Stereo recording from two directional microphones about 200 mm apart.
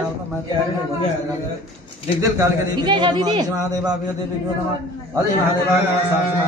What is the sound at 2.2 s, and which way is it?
A man's voice, 15° right (ahead or behind).